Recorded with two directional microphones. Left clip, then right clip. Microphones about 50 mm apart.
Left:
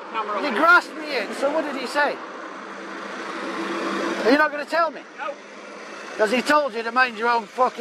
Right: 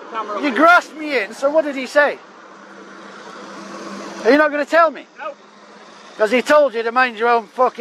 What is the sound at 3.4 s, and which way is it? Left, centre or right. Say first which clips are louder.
Vehicle: left 7 dB; left.